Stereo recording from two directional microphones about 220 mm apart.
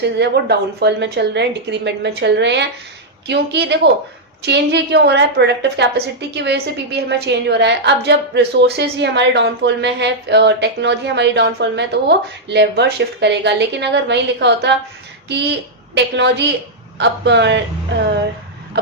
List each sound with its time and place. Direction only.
0.0 s a woman's voice: 50° right (ahead or behind)
16.0 s a woman's voice: 50° right (ahead or behind)